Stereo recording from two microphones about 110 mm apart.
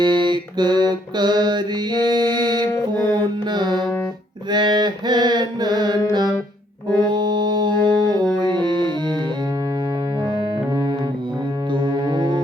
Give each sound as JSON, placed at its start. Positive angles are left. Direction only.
{"t": 0.0, "sound": "mantra", "side_deg": -45}
{"t": 2.9, "sound": "music", "side_deg": -40}
{"t": 4.5, "sound": "mantra", "side_deg": -45}
{"t": 6.1, "sound": "music", "side_deg": -40}
{"t": 11.7, "sound": "music", "side_deg": -45}